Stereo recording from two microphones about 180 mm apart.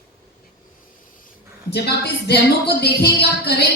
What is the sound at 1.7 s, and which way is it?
A woman's voice, 65° left (ahead or behind).